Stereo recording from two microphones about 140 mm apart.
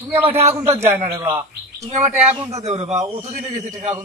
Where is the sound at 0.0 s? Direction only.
15° right (ahead or behind).